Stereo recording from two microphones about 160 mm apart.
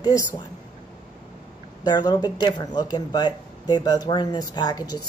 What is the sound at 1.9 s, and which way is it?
Speech, 25° left (ahead or behind).